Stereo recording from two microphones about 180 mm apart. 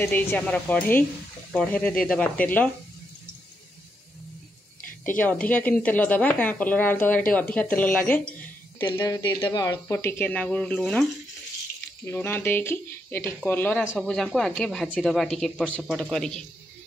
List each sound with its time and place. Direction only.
0.0 s a woman's voice: 10° left (ahead or behind)
5.0 s a woman's voice: 10° left (ahead or behind)
8.7 s a woman's voice: 25° left (ahead or behind); by 11.1 s 5° left (ahead or behind)
12.1 s a woman's voice: 10° left (ahead or behind)